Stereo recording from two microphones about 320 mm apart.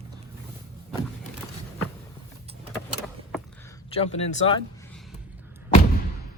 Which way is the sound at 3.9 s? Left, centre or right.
Centre.